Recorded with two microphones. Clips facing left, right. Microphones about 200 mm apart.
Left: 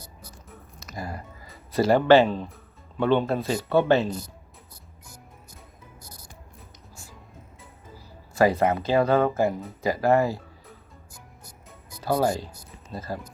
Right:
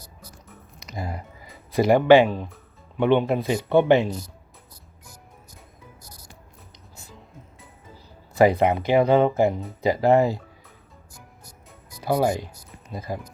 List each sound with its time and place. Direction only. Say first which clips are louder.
0.8 s a sound: right 2 dB; 20° right (ahead or behind)
1.7 s speech: right 2 dB; 15° right (ahead or behind)
8.4 s speech: right 3 dB; 15° right (ahead or behind)
12.0 s speech: right 2 dB; 15° right (ahead or behind)